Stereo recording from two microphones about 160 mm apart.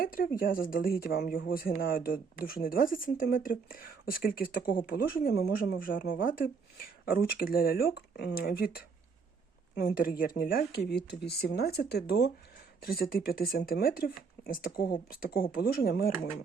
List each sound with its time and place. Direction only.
0.0 s speech: 60° left (ahead or behind)
9.8 s speech: 65° left (ahead or behind); by 12.3 s 90° left
12.8 s speech: 70° left (ahead or behind)